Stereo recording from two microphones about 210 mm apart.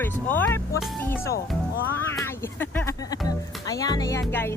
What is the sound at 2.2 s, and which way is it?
Speech, 10° left (ahead or behind).